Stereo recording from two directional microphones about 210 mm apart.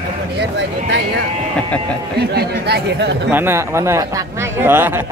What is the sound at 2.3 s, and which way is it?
Speech, 50° right (ahead or behind).